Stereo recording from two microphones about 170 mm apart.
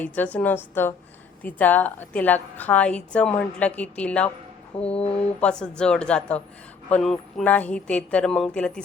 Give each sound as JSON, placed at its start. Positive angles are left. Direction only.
{"t": 0.0, "sound": "a woman's voice", "side_deg": 10}
{"t": 4.9, "sound": "speech", "side_deg": 35}
{"t": 5.4, "sound": "a woman's voice", "side_deg": 5}